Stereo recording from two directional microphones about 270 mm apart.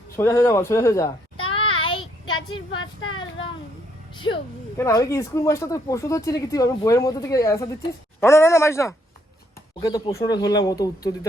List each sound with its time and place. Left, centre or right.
0.2 s a sound: centre
3.1 s speech: centre
4.8 s speech: centre